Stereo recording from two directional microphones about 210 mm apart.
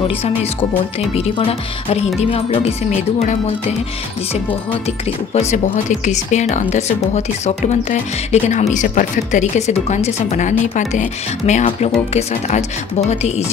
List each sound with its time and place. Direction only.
0.1 s speech: 30° left (ahead or behind)
5.3 s speech: 30° left (ahead or behind)